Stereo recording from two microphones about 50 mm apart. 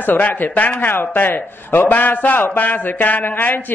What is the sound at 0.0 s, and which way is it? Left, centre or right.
A woman's voice, left.